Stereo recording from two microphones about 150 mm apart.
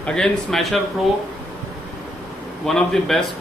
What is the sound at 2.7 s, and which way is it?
Speech, centre (ahead or behind).